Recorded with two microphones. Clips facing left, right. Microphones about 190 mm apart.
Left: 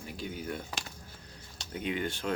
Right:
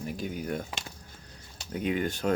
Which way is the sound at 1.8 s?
45° right (ahead or behind).